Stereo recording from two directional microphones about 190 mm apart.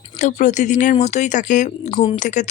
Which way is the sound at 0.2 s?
40° left (ahead or behind).